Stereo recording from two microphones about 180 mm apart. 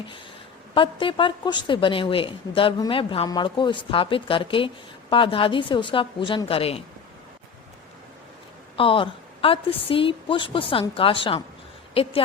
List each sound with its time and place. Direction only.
0.7 s a woman's voice: 30° left (ahead or behind)
8.7 s a woman's voice: 30° left (ahead or behind)